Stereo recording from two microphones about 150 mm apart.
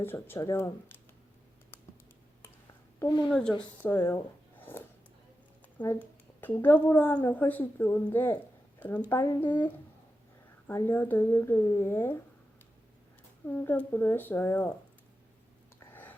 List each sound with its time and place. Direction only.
0.0 s a woman's voice: 15° left (ahead or behind)
3.2 s speech: 5° left (ahead or behind)
3.8 s a sound: 15° left (ahead or behind)
5.7 s a woman's voice: 15° left (ahead or behind)
10.8 s a woman's voice: 15° left (ahead or behind)
13.4 s a woman's voice: 10° left (ahead or behind)
15.8 s a sound: 10° left (ahead or behind)